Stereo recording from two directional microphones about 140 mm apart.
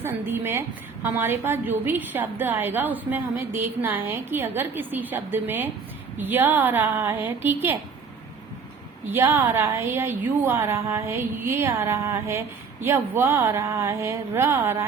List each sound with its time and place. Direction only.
0.0 s a woman's voice: 15° right (ahead or behind)
9.0 s a woman's voice: 15° right (ahead or behind)